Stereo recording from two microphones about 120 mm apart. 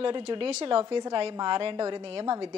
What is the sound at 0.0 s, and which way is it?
A woman's voice, 45° right (ahead or behind).